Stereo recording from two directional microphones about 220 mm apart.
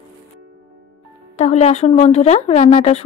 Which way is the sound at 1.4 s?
30° left (ahead or behind).